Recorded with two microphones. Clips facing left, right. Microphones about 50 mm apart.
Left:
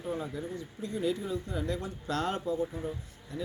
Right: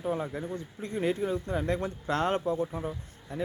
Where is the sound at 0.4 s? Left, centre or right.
Right.